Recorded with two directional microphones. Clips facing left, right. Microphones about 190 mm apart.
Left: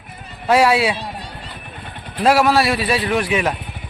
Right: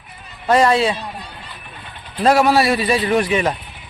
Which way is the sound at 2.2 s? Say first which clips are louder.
Right 1 dB; 5° left (ahead or behind).